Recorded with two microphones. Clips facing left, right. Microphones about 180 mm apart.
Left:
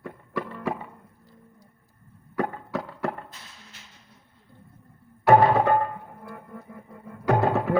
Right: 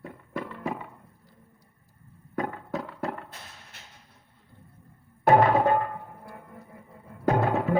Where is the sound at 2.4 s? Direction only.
65° left (ahead or behind).